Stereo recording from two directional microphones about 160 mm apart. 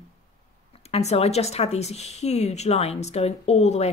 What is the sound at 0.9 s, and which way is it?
Speech, 40° left (ahead or behind).